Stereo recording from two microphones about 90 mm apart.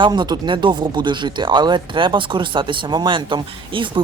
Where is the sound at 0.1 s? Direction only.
55° right (ahead or behind).